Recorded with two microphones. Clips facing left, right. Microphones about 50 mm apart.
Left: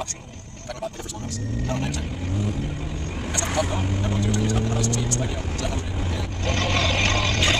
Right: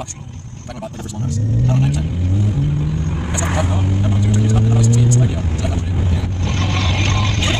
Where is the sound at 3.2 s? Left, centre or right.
Centre.